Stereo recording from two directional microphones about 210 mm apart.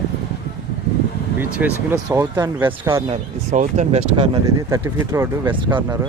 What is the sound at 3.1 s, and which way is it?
Speech, 35° right (ahead or behind).